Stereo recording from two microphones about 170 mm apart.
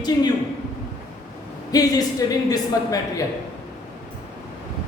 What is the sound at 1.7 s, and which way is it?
A woman's voice, 20° left (ahead or behind).